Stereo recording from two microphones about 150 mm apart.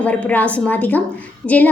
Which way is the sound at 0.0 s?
10° left (ahead or behind).